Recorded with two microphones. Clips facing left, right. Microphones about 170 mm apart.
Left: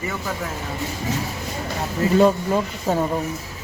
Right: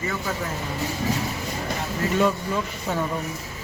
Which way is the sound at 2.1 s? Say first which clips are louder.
Left 6 dB; 40° left (ahead or behind).